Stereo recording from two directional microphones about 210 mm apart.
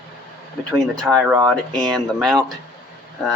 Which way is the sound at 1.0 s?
5° right (ahead or behind).